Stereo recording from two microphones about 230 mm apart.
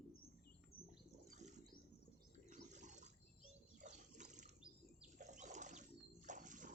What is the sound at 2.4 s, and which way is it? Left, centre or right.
Water, right.